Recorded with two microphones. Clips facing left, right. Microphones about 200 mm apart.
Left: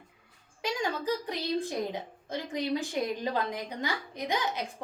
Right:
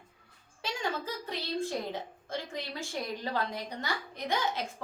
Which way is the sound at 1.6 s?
15° left (ahead or behind).